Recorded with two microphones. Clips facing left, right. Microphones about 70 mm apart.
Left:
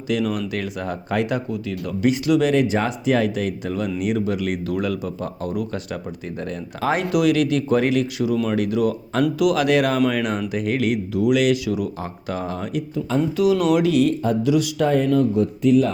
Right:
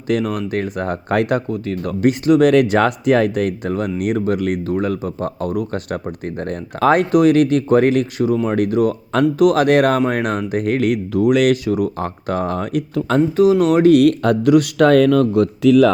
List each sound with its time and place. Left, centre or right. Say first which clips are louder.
0.1 s speech: right 4 dB; right
2.5 s speech: right 6 dB; right
13.3 s speech: right 4 dB; right
13.9 s speech: right 6 dB; right